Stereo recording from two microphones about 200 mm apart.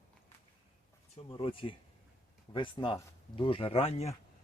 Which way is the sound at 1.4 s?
25° left (ahead or behind).